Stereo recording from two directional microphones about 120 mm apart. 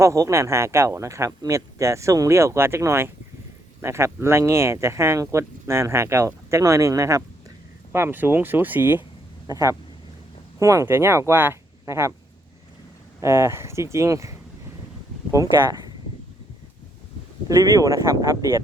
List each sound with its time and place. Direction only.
0.0 s speech: 25° right (ahead or behind)
9.5 s speech: 25° right (ahead or behind)
13.1 s speech: 25° right (ahead or behind)
17.5 s speech: 30° right (ahead or behind)